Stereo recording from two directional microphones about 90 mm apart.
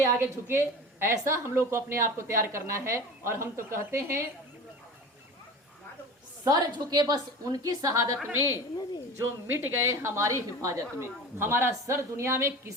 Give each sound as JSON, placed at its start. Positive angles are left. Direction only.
{"t": 0.2, "sound": "speech", "side_deg": -30}
{"t": 6.4, "sound": "a woman's voice", "side_deg": -50}
{"t": 9.1, "sound": "speech", "side_deg": -25}